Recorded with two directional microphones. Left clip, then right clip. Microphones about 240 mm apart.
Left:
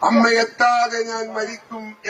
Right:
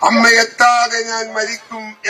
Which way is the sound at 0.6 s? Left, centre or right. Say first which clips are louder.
Right 5 dB; centre.